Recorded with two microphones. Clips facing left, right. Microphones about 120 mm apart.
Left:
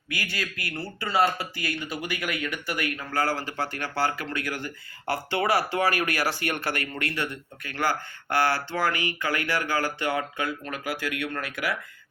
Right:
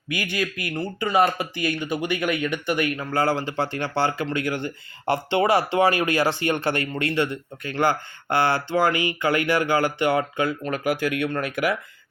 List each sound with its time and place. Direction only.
0.1 s speech: 20° right (ahead or behind)